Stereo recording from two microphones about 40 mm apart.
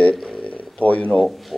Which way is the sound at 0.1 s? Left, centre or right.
Centre.